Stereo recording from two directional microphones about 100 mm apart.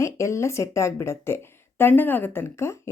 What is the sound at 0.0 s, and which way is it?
Speech, 30° left (ahead or behind).